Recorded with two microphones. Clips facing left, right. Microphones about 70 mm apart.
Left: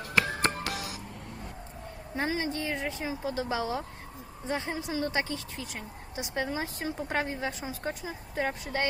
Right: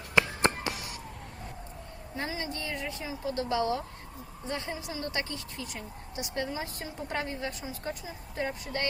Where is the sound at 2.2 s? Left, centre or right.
Left.